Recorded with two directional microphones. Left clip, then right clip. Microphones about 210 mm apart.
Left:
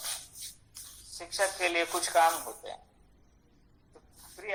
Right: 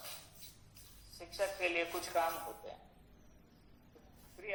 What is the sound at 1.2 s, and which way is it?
A man's voice, 45° left (ahead or behind).